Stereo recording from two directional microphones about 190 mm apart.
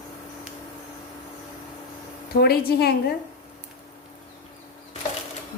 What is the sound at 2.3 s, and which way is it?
Speech, 55° left (ahead or behind).